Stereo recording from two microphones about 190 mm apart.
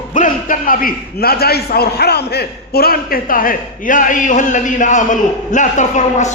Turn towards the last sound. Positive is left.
turn(degrees=40)  # may be behind; listen again after turning